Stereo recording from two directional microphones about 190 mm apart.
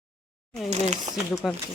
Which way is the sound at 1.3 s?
15° left (ahead or behind).